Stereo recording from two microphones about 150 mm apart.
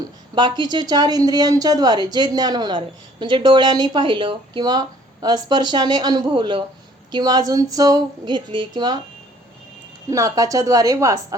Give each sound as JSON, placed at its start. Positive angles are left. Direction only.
{"t": 0.3, "sound": "a woman's voice", "side_deg": -30}
{"t": 10.1, "sound": "a woman's voice", "side_deg": -20}